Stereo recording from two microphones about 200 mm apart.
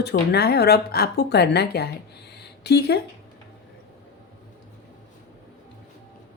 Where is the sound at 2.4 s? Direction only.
55° left (ahead or behind).